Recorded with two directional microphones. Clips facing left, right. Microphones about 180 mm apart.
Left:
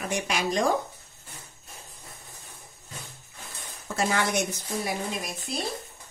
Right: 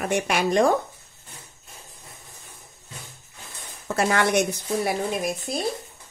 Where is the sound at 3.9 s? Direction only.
60° right (ahead or behind).